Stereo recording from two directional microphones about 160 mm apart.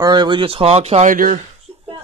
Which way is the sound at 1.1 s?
60° right (ahead or behind).